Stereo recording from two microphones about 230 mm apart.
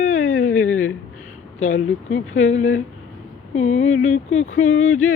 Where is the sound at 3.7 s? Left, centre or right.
Left.